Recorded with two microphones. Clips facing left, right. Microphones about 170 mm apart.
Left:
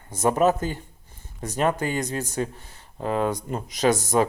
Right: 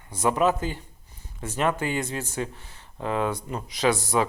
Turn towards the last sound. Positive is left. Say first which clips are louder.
# left 2 dB
turn(degrees=45)  # may be behind; listen again after turning